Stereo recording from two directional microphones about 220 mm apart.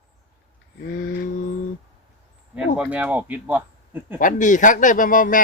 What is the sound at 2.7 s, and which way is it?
Speech, 5° right (ahead or behind).